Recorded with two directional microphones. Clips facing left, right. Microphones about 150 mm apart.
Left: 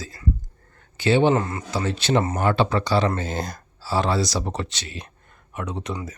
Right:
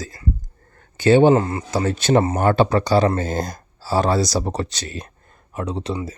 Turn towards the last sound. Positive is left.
turn(degrees=-30)  # may be behind; listen again after turning